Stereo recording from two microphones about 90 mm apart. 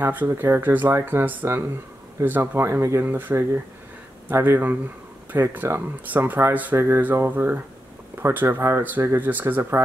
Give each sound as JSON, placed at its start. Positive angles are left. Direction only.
{"t": 0.0, "sound": "speech", "side_deg": -20}